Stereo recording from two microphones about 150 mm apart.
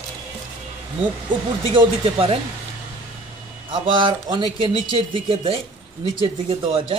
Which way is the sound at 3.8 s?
35° right (ahead or behind).